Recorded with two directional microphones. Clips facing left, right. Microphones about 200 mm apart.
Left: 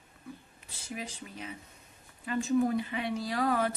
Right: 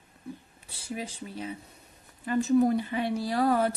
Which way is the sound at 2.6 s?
40° right (ahead or behind).